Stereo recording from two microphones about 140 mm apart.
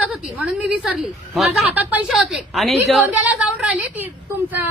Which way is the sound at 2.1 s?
Centre (ahead or behind).